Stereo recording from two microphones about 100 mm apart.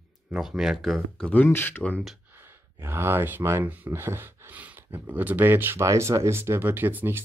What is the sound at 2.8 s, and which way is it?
Speech, 25° right (ahead or behind).